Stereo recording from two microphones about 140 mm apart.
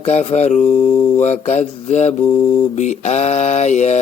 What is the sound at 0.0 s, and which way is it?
Mantra, 55° left (ahead or behind).